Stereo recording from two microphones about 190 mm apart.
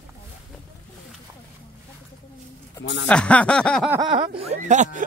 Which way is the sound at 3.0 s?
5° left (ahead or behind).